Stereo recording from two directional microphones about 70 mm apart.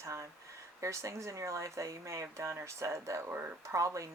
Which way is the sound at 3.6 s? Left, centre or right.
Right.